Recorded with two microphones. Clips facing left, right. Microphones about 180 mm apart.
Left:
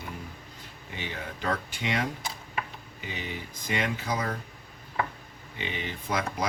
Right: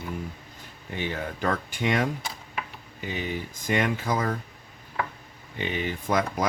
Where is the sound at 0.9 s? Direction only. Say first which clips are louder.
Right 6 dB; 50° right (ahead or behind).